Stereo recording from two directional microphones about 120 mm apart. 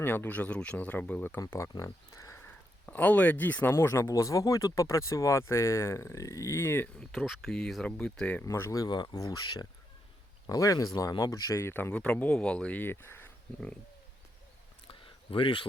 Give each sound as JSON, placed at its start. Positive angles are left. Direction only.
{"t": 0.0, "sound": "speech", "side_deg": 15}
{"t": 2.4, "sound": "speech", "side_deg": 15}
{"t": 7.0, "sound": "speech", "side_deg": 0}
{"t": 8.4, "sound": "speech", "side_deg": 25}
{"t": 14.8, "sound": "a sound", "side_deg": 45}